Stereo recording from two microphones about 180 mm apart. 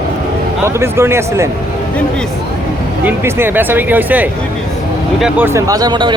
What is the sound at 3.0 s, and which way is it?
Speech, 10° right (ahead or behind).